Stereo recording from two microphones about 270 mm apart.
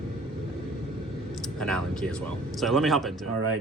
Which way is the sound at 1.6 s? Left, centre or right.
Centre.